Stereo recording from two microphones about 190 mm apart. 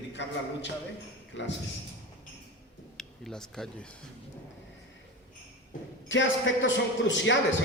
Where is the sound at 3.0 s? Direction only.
Centre (ahead or behind).